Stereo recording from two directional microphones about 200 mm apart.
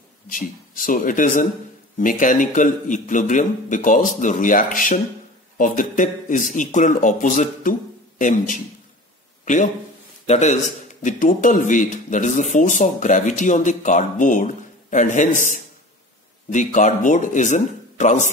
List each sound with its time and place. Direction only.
0.3 s speech: 45° left (ahead or behind)